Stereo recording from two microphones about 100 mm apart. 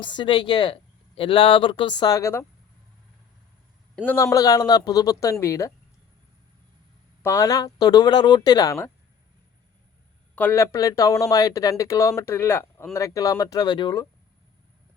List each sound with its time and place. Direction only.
0.0 s speech: 55° left (ahead or behind)
2.1 s a man's voice: 30° left (ahead or behind)
3.9 s a man's voice: 20° left (ahead or behind)
4.3 s speech: 35° left (ahead or behind)
7.2 s speech: 30° left (ahead or behind)
10.5 s speech: 30° left (ahead or behind); by 13.9 s 50° left (ahead or behind)